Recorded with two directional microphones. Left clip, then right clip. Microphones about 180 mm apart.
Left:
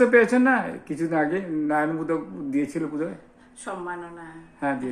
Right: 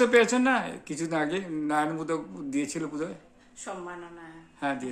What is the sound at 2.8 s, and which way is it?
A woman's voice, centre (ahead or behind).